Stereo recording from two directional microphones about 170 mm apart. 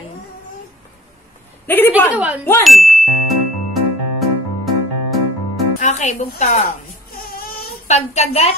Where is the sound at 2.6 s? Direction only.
Centre (ahead or behind).